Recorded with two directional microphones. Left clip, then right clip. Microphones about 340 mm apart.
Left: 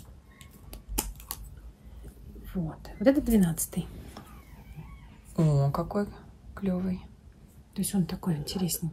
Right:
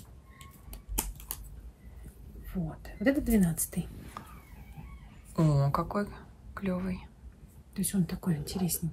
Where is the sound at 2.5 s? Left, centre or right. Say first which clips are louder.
Left 2 dB; centre.